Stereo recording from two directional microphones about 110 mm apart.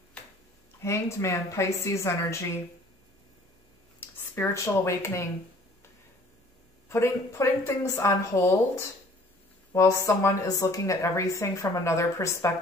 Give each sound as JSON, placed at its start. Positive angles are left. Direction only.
{"t": 0.8, "sound": "speech", "side_deg": 25}
{"t": 4.0, "sound": "speech", "side_deg": 20}
{"t": 6.9, "sound": "speech", "side_deg": 25}